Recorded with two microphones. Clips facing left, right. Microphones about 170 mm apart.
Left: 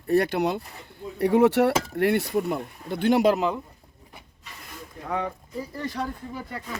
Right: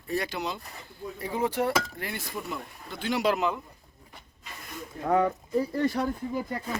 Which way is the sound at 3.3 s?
30° left (ahead or behind).